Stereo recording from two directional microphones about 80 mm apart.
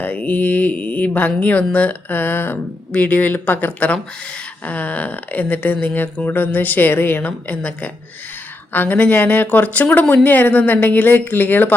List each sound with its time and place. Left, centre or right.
0.0 s speech: left